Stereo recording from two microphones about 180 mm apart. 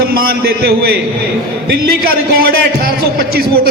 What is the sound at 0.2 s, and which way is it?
Speech, 60° right (ahead or behind).